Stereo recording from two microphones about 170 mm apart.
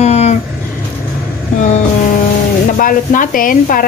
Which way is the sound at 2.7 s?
55° left (ahead or behind).